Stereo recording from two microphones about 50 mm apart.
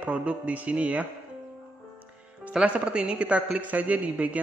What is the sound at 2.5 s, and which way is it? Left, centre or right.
A man's voice, right.